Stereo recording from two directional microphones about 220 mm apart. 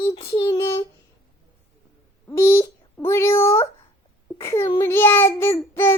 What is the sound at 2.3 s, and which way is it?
A child's voice, 15° left (ahead or behind).